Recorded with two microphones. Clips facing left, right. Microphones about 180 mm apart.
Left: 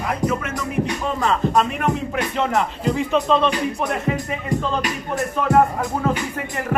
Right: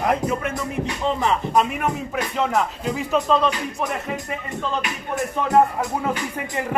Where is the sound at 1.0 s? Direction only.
15° right (ahead or behind).